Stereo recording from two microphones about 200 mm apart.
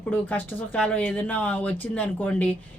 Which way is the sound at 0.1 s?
5° left (ahead or behind).